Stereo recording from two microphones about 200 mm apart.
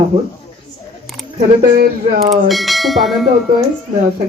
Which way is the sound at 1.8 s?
50° right (ahead or behind).